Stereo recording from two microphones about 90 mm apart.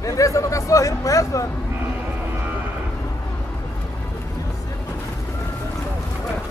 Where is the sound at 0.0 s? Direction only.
40° left (ahead or behind).